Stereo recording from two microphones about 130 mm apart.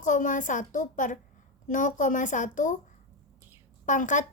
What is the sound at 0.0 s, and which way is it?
A woman's voice, 75° left (ahead or behind).